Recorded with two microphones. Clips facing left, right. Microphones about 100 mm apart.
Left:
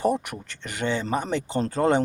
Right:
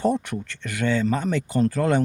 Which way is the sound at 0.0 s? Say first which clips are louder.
Right 1 dB; 15° left (ahead or behind).